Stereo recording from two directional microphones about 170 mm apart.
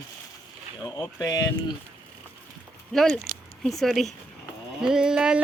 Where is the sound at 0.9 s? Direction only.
20° left (ahead or behind).